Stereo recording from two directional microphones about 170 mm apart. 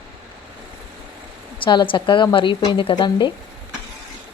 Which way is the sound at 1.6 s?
30° left (ahead or behind).